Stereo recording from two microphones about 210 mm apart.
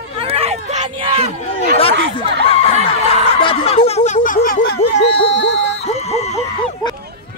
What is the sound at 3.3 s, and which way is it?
Snicker, 25° left (ahead or behind).